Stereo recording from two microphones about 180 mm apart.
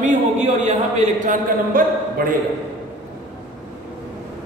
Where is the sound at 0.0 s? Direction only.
40° right (ahead or behind).